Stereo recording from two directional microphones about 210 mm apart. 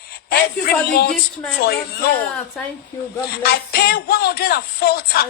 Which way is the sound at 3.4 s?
50° left (ahead or behind).